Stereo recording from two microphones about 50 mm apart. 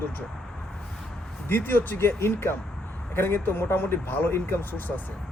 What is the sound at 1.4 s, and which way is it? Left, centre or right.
A man's voice, left.